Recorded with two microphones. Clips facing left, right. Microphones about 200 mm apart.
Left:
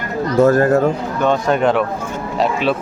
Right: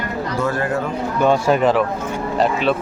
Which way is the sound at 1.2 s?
5° right (ahead or behind).